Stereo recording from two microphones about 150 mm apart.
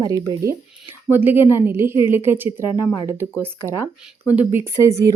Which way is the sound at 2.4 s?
35° left (ahead or behind).